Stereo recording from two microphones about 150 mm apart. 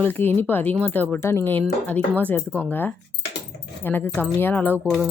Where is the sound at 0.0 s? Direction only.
15° left (ahead or behind).